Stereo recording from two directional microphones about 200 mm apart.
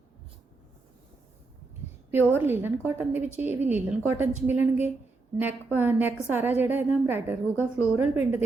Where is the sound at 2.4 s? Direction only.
10° right (ahead or behind).